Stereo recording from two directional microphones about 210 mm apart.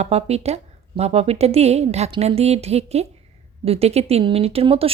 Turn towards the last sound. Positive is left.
turn(degrees=-25)  # may be behind; listen again after turning